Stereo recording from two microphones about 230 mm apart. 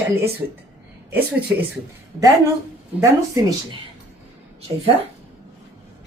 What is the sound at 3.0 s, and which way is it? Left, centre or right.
Speech, centre.